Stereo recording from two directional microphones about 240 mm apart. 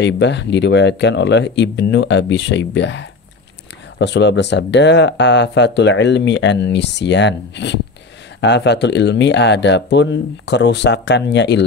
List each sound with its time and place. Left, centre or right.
0.0 s speech: left